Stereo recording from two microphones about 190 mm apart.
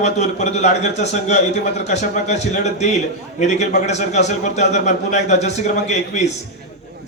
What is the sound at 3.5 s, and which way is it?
A man's voice, 35° left (ahead or behind).